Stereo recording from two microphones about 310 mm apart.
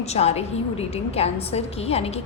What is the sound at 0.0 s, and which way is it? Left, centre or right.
A woman's voice, centre.